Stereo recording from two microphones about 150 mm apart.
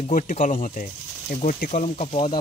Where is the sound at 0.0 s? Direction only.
60° left (ahead or behind).